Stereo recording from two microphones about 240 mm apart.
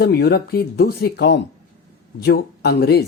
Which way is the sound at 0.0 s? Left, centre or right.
Left.